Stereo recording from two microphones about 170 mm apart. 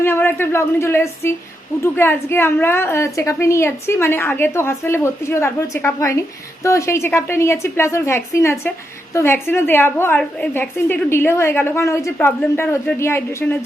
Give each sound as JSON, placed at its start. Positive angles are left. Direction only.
{"t": 0.0, "sound": "a woman's voice", "side_deg": 15}